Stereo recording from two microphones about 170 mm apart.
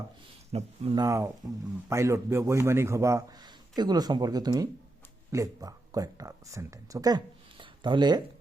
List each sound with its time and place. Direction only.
0.5 s speech: 35° right (ahead or behind)
0.9 s a man's voice: 20° right (ahead or behind)
7.6 s a sound: 25° right (ahead or behind)